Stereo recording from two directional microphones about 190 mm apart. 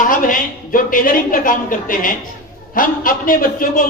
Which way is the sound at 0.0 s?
45° left (ahead or behind).